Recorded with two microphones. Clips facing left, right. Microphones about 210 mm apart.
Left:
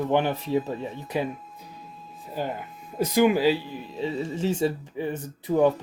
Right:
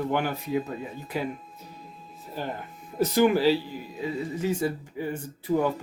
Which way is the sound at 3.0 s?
10° left (ahead or behind).